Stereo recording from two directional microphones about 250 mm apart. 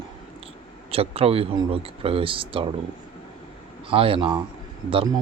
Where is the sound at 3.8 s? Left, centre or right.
Right.